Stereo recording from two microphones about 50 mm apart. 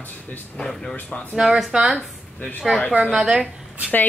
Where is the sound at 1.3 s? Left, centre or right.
Centre.